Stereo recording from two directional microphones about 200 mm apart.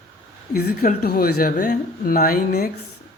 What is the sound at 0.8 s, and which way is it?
Speech, 50° left (ahead or behind).